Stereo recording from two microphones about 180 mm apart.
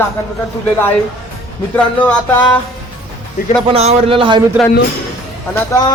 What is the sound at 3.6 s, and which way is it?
Speech, 30° right (ahead or behind).